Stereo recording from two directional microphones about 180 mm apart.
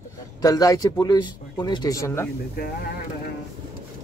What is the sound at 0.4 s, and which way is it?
Speech, 20° left (ahead or behind).